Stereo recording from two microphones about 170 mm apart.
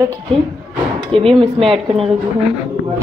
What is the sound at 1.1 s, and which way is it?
Speech, 35° right (ahead or behind).